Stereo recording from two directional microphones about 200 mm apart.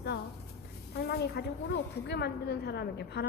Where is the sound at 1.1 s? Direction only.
55° left (ahead or behind).